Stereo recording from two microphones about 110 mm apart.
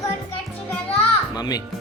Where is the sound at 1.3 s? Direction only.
35° left (ahead or behind).